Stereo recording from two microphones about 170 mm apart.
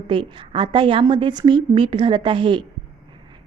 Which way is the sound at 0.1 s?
30° right (ahead or behind).